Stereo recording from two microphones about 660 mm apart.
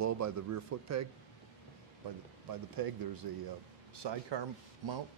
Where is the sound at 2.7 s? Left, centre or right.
Right.